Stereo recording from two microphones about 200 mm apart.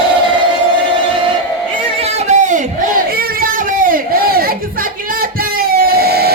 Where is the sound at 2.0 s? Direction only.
35° right (ahead or behind).